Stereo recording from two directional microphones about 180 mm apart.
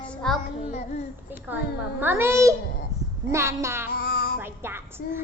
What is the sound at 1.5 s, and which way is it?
A child's voice, 10° right (ahead or behind).